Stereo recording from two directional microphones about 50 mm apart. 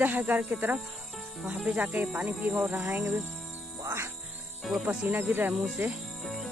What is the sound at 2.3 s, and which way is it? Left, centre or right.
Speech, right.